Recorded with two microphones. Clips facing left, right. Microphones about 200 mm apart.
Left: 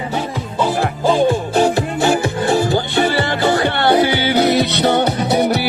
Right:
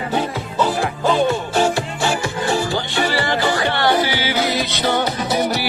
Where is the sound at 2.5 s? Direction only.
55° left (ahead or behind).